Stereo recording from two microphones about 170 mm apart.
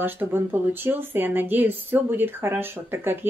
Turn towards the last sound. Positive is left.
turn(degrees=-15)  # may be behind; listen again after turning